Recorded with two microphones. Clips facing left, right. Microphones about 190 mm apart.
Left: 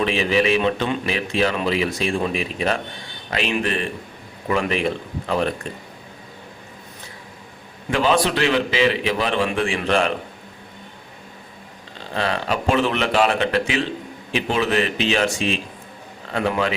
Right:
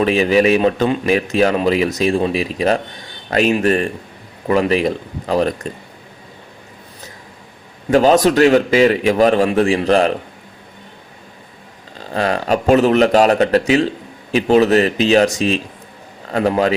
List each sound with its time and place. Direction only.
0.0 s a man's voice: 40° right (ahead or behind)
7.9 s a man's voice: 40° right (ahead or behind)
11.9 s a man's voice: 45° right (ahead or behind)